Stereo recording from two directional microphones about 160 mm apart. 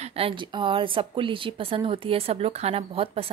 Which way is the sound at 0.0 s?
35° right (ahead or behind).